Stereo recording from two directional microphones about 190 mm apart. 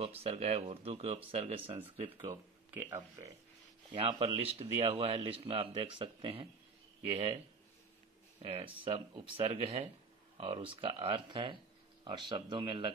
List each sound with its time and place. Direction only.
0.0 s a man's voice: 30° right (ahead or behind)
2.2 s speech: 15° right (ahead or behind)
3.9 s a man's voice: 30° right (ahead or behind)